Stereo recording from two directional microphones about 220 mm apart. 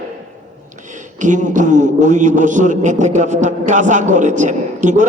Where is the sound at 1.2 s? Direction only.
35° right (ahead or behind).